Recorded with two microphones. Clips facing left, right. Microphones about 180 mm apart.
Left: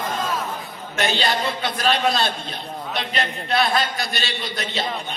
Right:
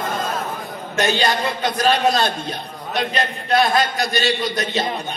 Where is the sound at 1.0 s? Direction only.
45° right (ahead or behind).